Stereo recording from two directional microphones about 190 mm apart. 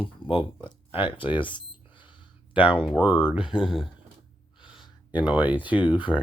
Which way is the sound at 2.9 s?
5° right (ahead or behind).